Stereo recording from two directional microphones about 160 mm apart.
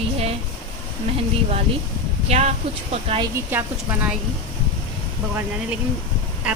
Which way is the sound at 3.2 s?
15° right (ahead or behind).